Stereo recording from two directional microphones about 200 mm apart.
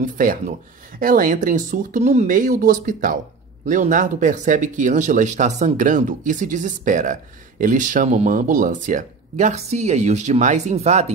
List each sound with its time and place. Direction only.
0.0 s speech: 45° right (ahead or behind)